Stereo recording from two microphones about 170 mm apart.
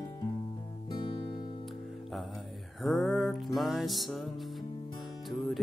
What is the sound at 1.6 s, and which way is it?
Music, centre (ahead or behind).